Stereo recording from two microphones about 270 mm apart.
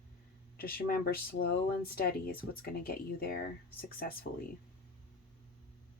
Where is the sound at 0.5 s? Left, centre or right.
Left.